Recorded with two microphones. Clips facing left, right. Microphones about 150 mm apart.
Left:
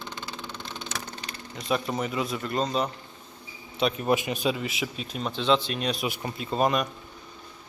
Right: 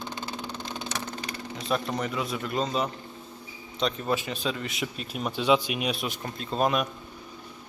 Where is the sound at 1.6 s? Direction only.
Centre (ahead or behind).